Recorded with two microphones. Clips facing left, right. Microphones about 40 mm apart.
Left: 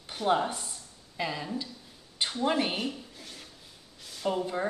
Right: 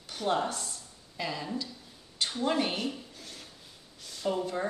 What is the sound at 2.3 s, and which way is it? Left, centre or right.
Speech, centre.